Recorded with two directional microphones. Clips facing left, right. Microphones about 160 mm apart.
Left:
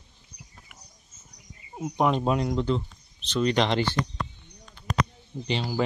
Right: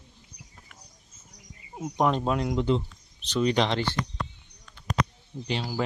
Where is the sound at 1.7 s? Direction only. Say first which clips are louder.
Left 1 dB; 5° left (ahead or behind).